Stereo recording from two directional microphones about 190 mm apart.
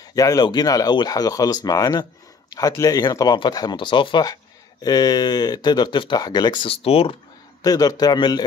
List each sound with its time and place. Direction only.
0.0 s speech: 20° left (ahead or behind)
7.6 s speech: 20° left (ahead or behind)